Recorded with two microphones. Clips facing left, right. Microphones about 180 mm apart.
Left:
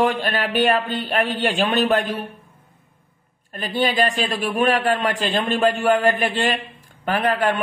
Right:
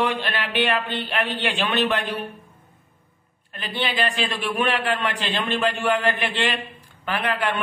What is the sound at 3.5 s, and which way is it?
A man's voice, 45° left (ahead or behind).